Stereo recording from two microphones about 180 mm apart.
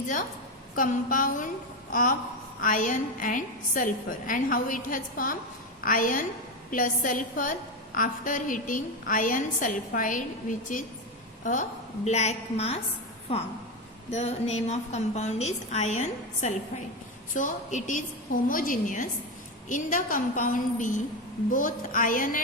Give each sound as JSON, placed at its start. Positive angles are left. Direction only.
{"t": 0.8, "sound": "a woman's voice", "side_deg": 50}
{"t": 11.4, "sound": "a woman's voice", "side_deg": 45}